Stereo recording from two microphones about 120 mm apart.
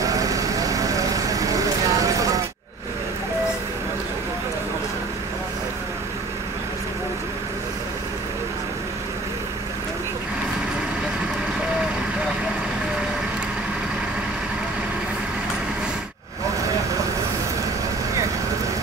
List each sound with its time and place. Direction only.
0.0 s vehicle: 30° right (ahead or behind)